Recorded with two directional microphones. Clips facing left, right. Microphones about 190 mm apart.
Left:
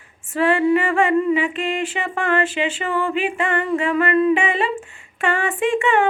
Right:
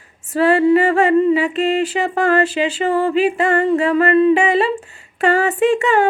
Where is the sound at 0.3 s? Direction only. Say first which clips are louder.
Right 4 dB; 40° right (ahead or behind).